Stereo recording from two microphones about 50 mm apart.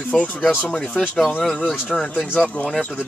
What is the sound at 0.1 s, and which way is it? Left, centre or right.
Speech, left.